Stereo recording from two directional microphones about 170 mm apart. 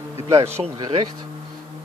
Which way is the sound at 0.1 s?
15° right (ahead or behind).